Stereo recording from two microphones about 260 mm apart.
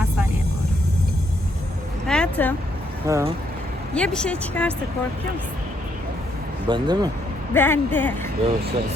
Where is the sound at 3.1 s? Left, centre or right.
Centre.